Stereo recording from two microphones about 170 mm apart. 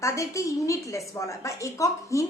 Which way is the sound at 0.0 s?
20° left (ahead or behind).